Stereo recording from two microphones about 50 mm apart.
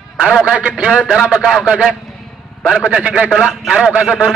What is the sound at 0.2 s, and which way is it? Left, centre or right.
Speech, centre.